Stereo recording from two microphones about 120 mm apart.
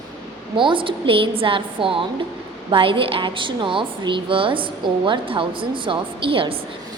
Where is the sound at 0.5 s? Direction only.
45° right (ahead or behind).